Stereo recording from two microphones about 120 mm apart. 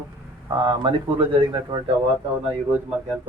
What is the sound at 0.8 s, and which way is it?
A man's voice, 45° right (ahead or behind).